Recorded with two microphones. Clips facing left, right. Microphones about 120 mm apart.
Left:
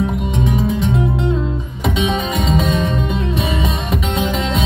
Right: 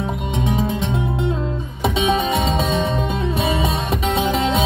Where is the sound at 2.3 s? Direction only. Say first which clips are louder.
Left 2 dB; 30° right (ahead or behind).